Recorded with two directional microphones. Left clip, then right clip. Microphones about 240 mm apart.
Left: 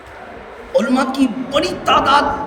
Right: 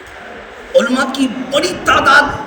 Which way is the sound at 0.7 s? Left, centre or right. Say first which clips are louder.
Right 3 dB; left.